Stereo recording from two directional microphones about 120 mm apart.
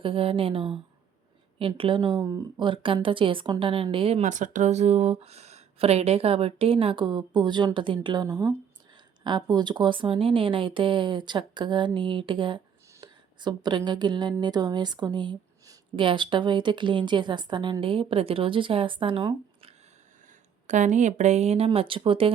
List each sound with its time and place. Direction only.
0.0 s speech: 50° right (ahead or behind)
4.2 s speech: 90° right; by 19.7 s 45° right (ahead or behind)
20.7 s speech: 90° right; by 22.3 s 45° right (ahead or behind)